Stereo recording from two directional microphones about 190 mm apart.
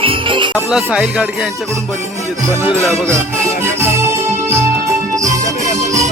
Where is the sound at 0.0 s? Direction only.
25° right (ahead or behind).